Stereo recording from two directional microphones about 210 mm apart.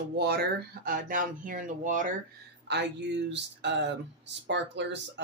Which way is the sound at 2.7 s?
55° right (ahead or behind).